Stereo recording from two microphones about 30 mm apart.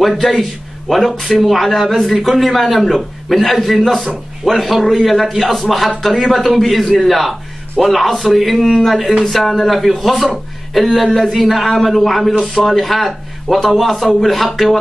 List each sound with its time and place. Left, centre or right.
0.3 s a man's voice: centre